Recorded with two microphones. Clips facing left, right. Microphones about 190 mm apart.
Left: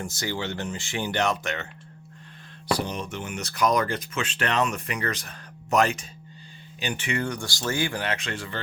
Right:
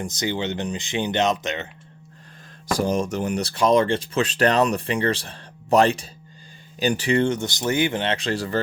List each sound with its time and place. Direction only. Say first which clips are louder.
0.0 s speech: right 5 dB; 20° right (ahead or behind)
2.6 s speech: right 6 dB; 45° right (ahead or behind)